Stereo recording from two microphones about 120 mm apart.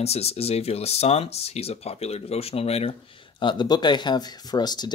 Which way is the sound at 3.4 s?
40° left (ahead or behind).